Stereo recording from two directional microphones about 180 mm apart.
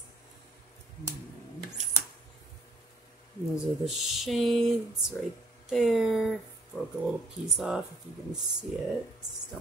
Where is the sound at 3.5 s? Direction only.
Centre (ahead or behind).